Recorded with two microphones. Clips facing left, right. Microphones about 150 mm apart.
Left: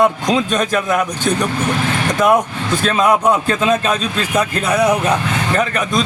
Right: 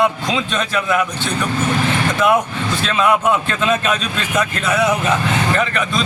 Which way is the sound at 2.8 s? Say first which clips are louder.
Left 2 dB; 40° left (ahead or behind).